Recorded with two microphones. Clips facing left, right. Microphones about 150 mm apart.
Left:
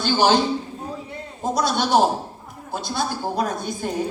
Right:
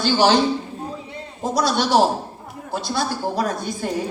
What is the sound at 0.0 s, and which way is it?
Speech, 50° left (ahead or behind).